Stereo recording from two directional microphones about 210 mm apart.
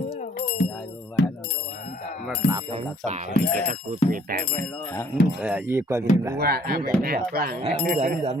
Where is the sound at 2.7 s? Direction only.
35° right (ahead or behind).